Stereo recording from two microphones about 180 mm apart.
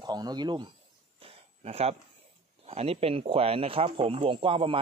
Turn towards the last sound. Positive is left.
turn(degrees=-30)  # may be behind; listen again after turning